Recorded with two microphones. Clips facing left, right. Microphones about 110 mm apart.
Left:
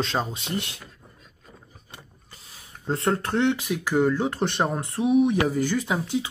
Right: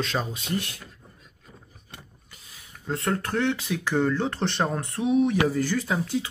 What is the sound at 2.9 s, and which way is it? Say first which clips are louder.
Speech: left 3 dB; 25° left (ahead or behind).